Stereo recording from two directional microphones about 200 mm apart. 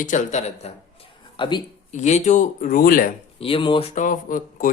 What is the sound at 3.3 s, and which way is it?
Speech, 25° left (ahead or behind).